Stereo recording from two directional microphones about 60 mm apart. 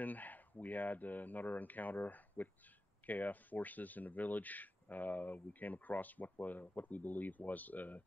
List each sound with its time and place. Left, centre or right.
0.0 s speech: left